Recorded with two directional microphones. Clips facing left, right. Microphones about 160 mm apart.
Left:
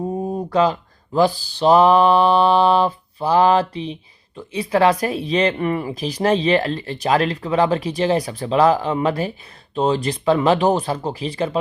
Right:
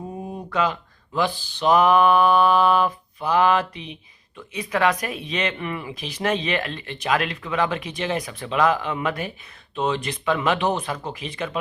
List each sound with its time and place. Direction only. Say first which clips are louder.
0.1 s speech: left 8 dB; 40° left (ahead or behind)